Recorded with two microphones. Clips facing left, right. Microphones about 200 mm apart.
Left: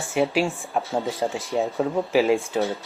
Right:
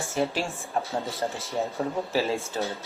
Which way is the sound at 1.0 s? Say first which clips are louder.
Left 5 dB; 15° left (ahead or behind).